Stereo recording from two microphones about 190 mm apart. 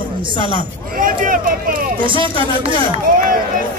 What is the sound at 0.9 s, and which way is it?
Speech, 45° right (ahead or behind).